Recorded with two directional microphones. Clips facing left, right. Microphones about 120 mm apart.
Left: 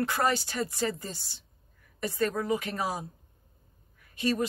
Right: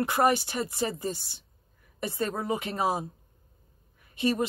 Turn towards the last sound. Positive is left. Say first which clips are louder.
# right 2 dB
turn(degrees=-20)  # may be behind; listen again after turning